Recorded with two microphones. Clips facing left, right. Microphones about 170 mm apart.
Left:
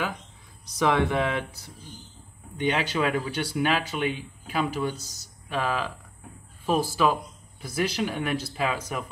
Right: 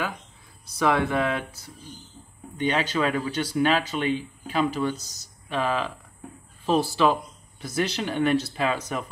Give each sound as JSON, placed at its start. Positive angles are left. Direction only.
{"t": 0.7, "sound": "speech", "side_deg": 20}
{"t": 2.5, "sound": "speech", "side_deg": 10}